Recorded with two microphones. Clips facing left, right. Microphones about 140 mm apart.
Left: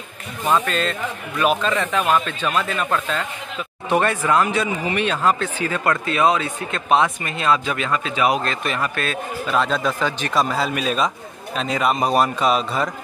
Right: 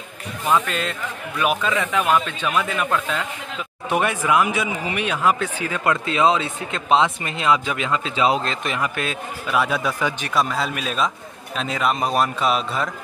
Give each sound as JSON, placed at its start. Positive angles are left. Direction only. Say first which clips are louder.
{"t": 0.7, "sound": "speech", "louder": "left 3 dB", "side_deg": -10}
{"t": 3.9, "sound": "speech", "louder": "left 1 dB", "side_deg": -15}
{"t": 10.3, "sound": "a man's voice", "louder": "left 2 dB", "side_deg": 0}